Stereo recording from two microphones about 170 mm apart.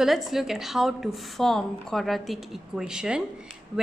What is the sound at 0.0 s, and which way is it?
A woman's voice, centre (ahead or behind).